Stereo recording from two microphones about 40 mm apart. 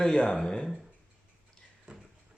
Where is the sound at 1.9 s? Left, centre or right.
Centre.